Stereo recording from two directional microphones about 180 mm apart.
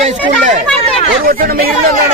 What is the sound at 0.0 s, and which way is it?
Chatter, 40° right (ahead or behind).